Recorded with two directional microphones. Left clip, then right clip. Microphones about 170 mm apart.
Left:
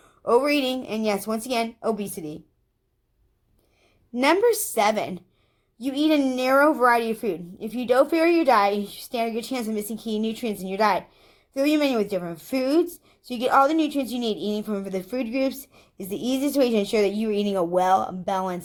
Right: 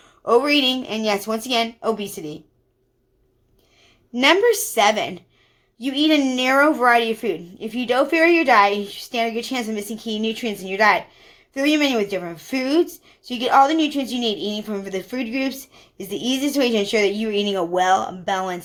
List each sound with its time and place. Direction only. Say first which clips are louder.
0.0 s a woman's voice: right 3 dB; 45° left (ahead or behind)
4.1 s a woman's voice: right 4 dB; 45° left (ahead or behind)